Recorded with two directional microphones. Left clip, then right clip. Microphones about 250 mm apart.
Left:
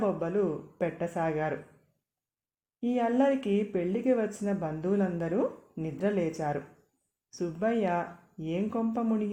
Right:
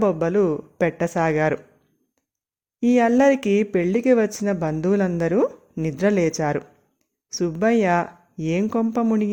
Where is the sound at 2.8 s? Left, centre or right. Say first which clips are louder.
Right 10 dB; right.